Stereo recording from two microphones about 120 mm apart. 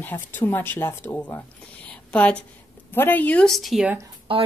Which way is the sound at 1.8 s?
10° left (ahead or behind).